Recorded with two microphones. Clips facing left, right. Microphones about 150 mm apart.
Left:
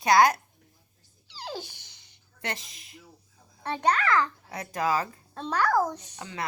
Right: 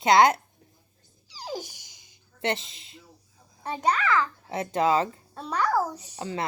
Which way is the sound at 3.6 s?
10° right (ahead or behind).